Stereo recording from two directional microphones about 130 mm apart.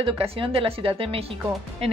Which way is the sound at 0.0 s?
45° right (ahead or behind).